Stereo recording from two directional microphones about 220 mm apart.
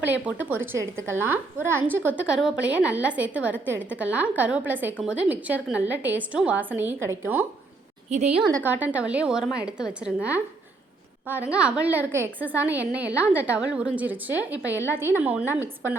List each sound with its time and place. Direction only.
0.0 s a woman's voice: 10° right (ahead or behind)
8.1 s a woman's voice: 30° right (ahead or behind)
8.5 s a woman's voice: 5° right (ahead or behind)
11.3 s a woman's voice: 5° right (ahead or behind)